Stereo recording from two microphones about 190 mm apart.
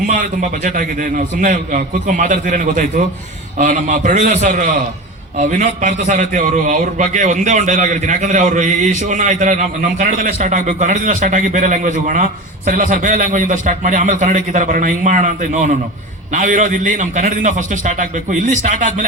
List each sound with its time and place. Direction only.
0.1 s a man's voice: 50° right (ahead or behind)